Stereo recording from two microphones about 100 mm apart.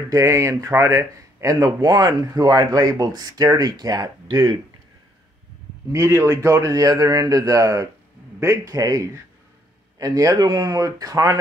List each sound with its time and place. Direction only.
0.1 s speech: 30° right (ahead or behind)
5.9 s speech: 25° right (ahead or behind)